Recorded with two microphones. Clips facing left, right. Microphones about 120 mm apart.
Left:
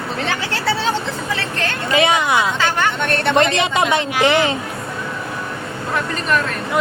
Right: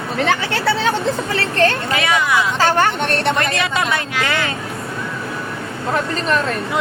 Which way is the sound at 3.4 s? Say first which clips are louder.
Left 3 dB; 25° left (ahead or behind).